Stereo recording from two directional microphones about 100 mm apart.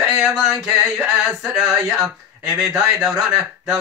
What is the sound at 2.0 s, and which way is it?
Speech, 5° right (ahead or behind).